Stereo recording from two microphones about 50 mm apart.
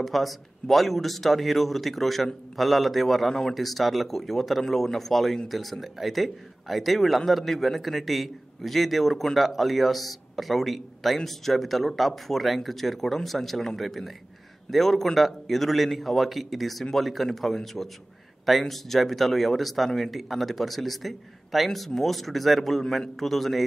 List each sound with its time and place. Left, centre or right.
0.0 s speech: centre